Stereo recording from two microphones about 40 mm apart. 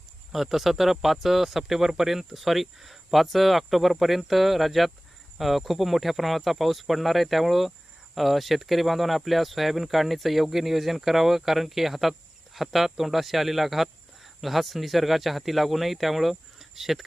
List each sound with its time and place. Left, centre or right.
0.3 s speech: centre